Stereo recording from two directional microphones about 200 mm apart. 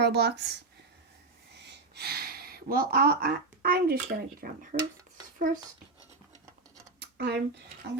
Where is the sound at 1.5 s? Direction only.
55° right (ahead or behind).